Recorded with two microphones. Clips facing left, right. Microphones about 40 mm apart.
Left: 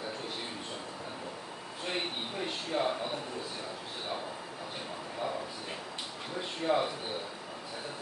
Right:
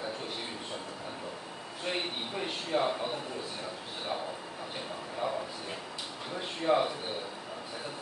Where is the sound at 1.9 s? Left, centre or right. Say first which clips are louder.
Right 1 dB; centre.